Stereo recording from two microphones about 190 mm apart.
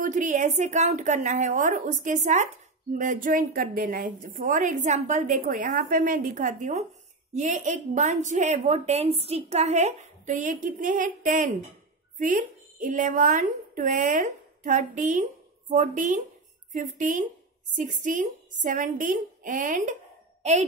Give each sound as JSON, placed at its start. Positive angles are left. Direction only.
{"t": 0.0, "sound": "a woman's voice", "side_deg": -40}